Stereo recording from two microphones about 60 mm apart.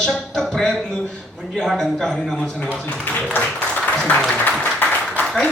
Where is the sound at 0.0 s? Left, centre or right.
Centre.